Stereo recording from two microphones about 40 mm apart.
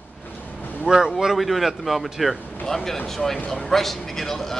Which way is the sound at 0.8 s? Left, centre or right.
Centre.